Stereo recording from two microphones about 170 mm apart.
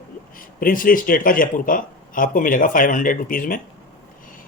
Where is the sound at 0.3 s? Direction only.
55° left (ahead or behind).